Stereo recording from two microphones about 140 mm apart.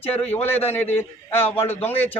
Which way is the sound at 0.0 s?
45° left (ahead or behind).